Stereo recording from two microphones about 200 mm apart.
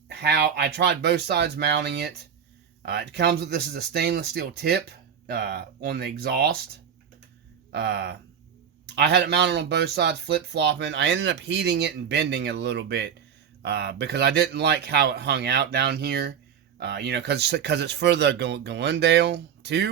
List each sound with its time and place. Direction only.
0.1 s speech: 55° right (ahead or behind)
7.7 s speech: 60° right (ahead or behind)